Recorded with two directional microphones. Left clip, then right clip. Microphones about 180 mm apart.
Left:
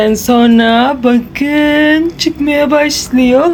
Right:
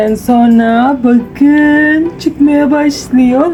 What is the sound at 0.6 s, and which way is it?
Speech, 15° left (ahead or behind).